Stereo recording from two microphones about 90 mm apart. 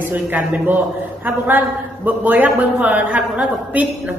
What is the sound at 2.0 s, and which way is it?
A woman's voice, 20° right (ahead or behind).